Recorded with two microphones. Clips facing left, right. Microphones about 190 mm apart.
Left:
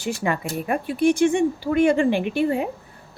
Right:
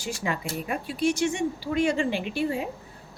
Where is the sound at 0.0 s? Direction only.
60° left (ahead or behind).